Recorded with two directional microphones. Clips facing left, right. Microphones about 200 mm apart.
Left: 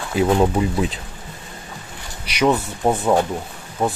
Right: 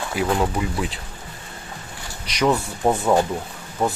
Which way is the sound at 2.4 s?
5° left (ahead or behind).